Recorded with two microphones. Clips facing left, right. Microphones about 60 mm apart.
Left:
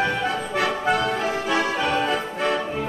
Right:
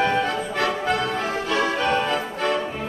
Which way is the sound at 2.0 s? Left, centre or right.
Centre.